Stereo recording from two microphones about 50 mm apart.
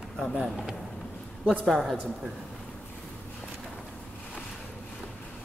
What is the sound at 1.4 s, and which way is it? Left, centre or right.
Speech, right.